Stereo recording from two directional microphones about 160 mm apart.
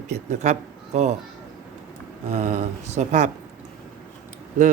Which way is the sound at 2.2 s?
45° right (ahead or behind).